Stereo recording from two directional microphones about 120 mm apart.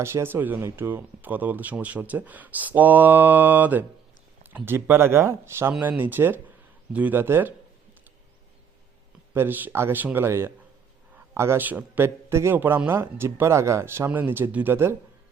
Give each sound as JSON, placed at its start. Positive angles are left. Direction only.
{"t": 0.0, "sound": "a man's voice", "side_deg": -20}
{"t": 9.3, "sound": "a man's voice", "side_deg": -20}